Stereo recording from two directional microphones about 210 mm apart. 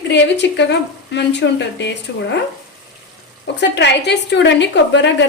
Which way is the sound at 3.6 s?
55° left (ahead or behind).